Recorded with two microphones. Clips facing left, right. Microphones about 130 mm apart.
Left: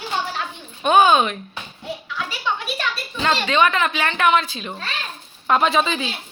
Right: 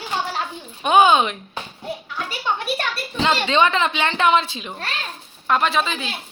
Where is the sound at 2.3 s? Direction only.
45° right (ahead or behind).